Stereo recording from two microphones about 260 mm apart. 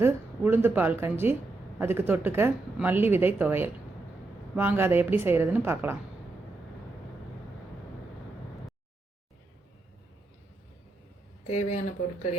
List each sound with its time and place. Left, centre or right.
0.0 s speech: centre
11.4 s speech: left